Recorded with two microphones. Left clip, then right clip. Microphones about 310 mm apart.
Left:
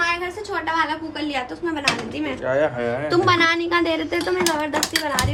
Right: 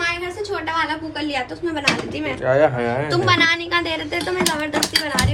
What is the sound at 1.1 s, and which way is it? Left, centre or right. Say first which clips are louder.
Speech: right 2 dB; centre.